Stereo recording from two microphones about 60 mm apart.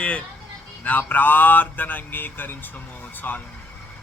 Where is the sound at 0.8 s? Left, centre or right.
Left.